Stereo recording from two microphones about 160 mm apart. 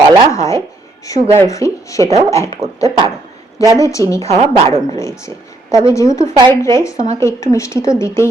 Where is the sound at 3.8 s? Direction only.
20° left (ahead or behind).